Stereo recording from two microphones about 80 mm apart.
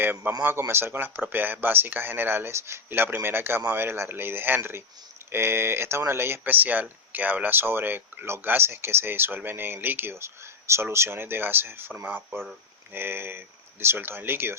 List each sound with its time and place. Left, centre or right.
0.0 s speech: right